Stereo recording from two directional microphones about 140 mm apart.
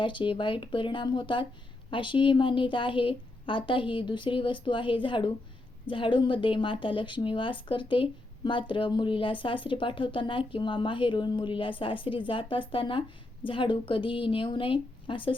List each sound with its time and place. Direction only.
0.0 s speech: 35° left (ahead or behind)